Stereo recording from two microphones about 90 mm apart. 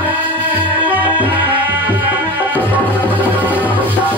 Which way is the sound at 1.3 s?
20° right (ahead or behind).